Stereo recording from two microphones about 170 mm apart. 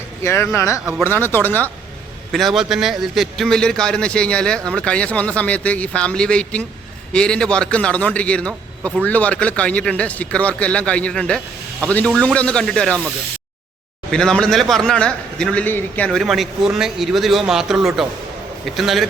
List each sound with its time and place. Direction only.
0.2 s a man's voice: 15° left (ahead or behind)
2.3 s a man's voice: centre (ahead or behind)
14.1 s speech: 5° left (ahead or behind)